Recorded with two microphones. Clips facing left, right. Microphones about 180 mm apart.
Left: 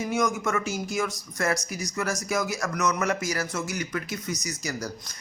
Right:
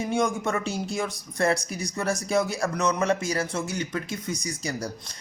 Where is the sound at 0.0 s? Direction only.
30° right (ahead or behind).